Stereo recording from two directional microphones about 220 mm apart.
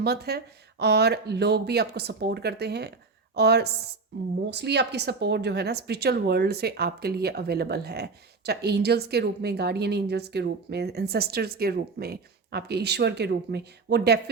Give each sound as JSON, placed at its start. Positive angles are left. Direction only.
{"t": 0.0, "sound": "a woman's voice", "side_deg": -45}